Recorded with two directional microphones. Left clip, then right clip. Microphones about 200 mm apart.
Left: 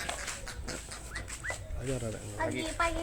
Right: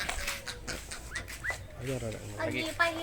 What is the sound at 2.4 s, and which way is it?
Speech, 50° right (ahead or behind).